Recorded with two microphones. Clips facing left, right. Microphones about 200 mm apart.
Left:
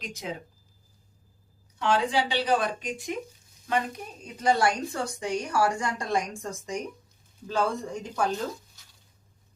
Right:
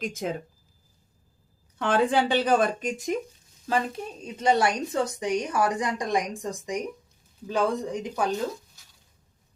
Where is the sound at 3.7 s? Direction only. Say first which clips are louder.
Right 2 dB; 30° right (ahead or behind).